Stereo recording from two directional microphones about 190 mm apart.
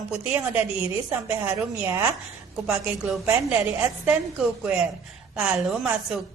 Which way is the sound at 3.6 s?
10° right (ahead or behind).